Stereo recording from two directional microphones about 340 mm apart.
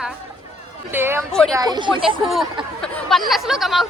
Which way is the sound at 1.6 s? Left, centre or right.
Centre.